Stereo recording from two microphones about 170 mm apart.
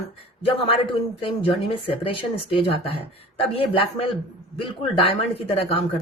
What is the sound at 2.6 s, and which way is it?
Speech, 35° left (ahead or behind).